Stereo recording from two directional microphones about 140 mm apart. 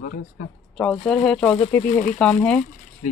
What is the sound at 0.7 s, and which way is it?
Speech, 5° left (ahead or behind).